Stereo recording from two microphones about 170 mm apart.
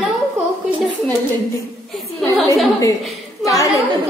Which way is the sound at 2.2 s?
Centre (ahead or behind).